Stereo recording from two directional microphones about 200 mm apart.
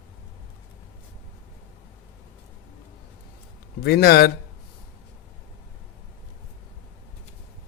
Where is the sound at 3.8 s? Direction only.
55° left (ahead or behind).